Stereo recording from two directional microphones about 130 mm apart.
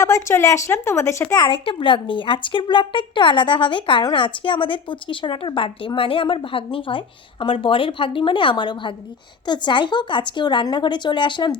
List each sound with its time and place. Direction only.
0.0 s speech: 20° left (ahead or behind)
1.5 s speech: 40° left (ahead or behind)